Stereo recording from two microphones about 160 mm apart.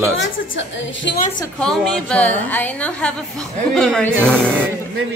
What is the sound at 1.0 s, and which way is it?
Speech, 90° left.